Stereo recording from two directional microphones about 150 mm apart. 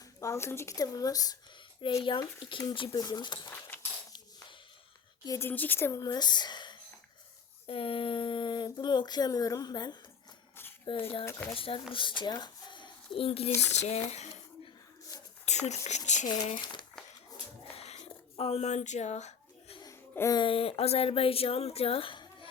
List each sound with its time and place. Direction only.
0.2 s speech: 20° left (ahead or behind)
1.8 s speech: 35° left (ahead or behind)
5.2 s speech: 20° left (ahead or behind); by 11.3 s 35° left (ahead or behind)
11.3 s speech: 15° left (ahead or behind)
11.5 s speech: 35° left (ahead or behind)
14.1 s a sound: 45° left (ahead or behind)
15.4 s speech: 50° left (ahead or behind)
17.7 s a sound: 45° left (ahead or behind)
19.8 s laughter: 20° left (ahead or behind)
20.4 s speech: 40° left (ahead or behind)